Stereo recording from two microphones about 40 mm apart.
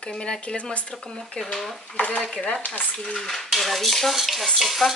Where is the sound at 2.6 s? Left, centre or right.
Left.